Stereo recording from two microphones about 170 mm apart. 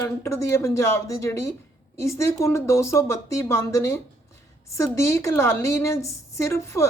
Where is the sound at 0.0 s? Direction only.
15° left (ahead or behind).